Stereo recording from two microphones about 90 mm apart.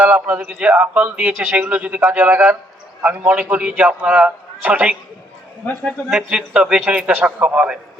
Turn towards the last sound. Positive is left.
turn(degrees=-10)  # may be behind; listen again after turning